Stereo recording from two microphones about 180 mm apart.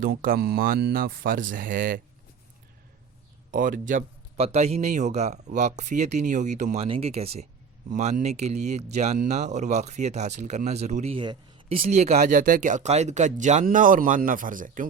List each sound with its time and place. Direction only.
0.0 s speech: 55° right (ahead or behind)
3.5 s speech: 50° right (ahead or behind)